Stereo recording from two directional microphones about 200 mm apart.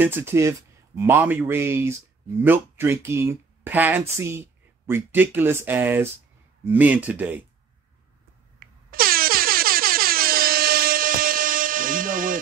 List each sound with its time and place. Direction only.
0.0 s speech: 10° right (ahead or behind)
8.5 s air horn: 45° right (ahead or behind)